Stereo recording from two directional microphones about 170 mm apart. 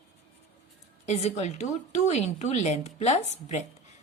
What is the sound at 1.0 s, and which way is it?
A woman's voice, 40° left (ahead or behind).